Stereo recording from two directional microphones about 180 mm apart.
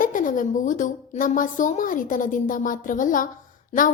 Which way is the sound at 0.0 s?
50° left (ahead or behind).